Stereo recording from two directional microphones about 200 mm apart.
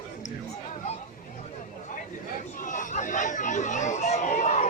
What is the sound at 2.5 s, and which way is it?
Chatter, 40° left (ahead or behind).